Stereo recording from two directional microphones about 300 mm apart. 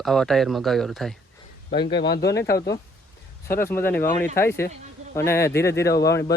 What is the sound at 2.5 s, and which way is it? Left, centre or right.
Speech, centre.